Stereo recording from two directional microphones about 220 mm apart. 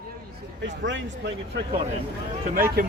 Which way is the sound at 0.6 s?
55° right (ahead or behind).